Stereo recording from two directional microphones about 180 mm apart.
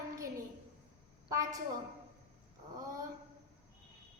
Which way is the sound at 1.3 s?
20° right (ahead or behind).